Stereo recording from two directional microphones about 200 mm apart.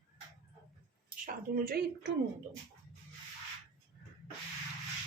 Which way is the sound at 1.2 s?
50° right (ahead or behind).